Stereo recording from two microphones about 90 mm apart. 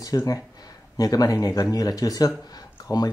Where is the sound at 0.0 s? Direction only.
40° left (ahead or behind).